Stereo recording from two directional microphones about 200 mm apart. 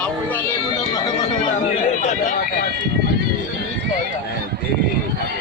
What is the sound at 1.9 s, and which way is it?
Speech, 35° left (ahead or behind).